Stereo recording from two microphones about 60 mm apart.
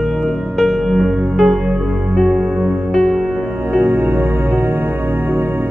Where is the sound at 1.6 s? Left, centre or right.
Right.